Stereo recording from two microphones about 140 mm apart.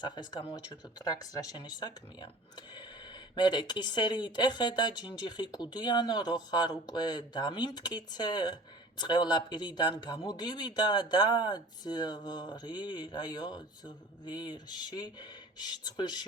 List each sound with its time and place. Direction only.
0.0 s speech: 30° left (ahead or behind)